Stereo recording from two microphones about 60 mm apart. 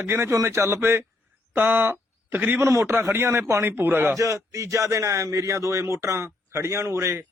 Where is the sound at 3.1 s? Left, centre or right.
Right.